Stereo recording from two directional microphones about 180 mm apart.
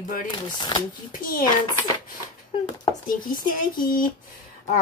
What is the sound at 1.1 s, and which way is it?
Speech, 50° left (ahead or behind).